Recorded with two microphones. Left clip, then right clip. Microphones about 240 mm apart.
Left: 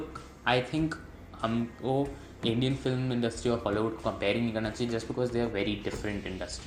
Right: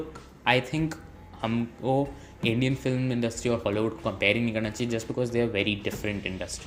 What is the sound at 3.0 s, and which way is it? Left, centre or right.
Speech, right.